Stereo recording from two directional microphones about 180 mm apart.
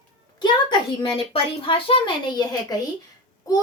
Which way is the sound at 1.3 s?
30° left (ahead or behind).